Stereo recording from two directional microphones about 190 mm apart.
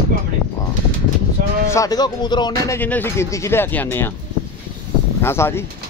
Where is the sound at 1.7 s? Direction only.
20° left (ahead or behind).